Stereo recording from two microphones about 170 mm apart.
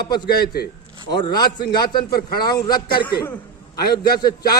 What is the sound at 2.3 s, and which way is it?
Speech, 25° left (ahead or behind).